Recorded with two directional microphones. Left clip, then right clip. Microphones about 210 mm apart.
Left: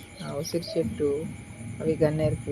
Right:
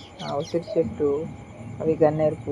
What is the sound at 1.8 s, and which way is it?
Speech, 10° left (ahead or behind).